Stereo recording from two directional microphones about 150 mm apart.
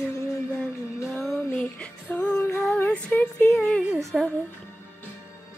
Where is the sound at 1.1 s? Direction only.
Centre (ahead or behind).